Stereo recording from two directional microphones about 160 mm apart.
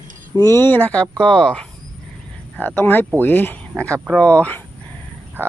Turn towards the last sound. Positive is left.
turn(degrees=10)  # may be behind; listen again after turning